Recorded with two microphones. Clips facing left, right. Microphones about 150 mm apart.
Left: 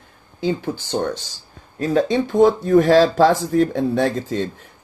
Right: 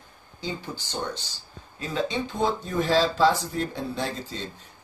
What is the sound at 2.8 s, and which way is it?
Speech, 45° left (ahead or behind).